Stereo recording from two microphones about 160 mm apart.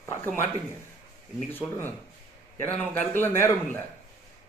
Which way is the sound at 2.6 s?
15° left (ahead or behind).